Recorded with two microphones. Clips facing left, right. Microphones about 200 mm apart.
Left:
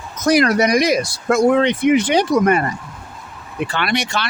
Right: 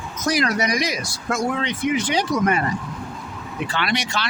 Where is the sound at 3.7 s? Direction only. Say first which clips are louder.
Left 3 dB; 55° left (ahead or behind).